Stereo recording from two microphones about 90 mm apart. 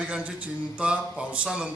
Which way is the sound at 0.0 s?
15° right (ahead or behind).